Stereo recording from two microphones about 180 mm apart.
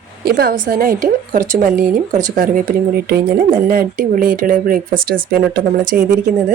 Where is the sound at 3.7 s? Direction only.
50° right (ahead or behind).